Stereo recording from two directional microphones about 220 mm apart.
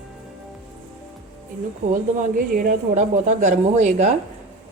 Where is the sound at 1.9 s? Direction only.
40° right (ahead or behind).